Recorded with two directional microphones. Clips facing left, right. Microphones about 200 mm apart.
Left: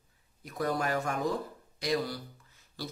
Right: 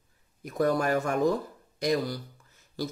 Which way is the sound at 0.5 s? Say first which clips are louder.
Right 6 dB; 50° right (ahead or behind).